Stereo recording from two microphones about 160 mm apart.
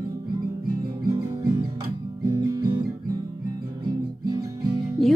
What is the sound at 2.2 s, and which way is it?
Music, 25° right (ahead or behind).